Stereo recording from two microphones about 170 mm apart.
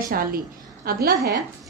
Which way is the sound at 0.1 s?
60° right (ahead or behind).